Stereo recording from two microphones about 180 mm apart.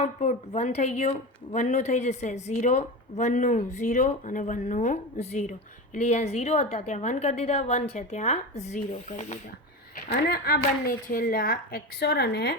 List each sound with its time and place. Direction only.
0.0 s a woman's voice: 40° left (ahead or behind)
10.1 s a woman's voice: 60° left (ahead or behind)